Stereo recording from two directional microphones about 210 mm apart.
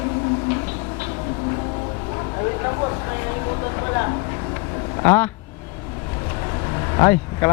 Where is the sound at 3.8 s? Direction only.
20° left (ahead or behind).